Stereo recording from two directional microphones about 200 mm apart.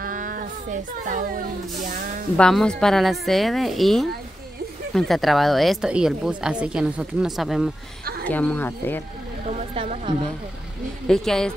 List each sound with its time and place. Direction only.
0.0 s speech: 40° right (ahead or behind)
2.3 s a woman's voice: 5° left (ahead or behind)
9.5 s speech: 35° right (ahead or behind)
11.1 s a woman's voice: 5° left (ahead or behind)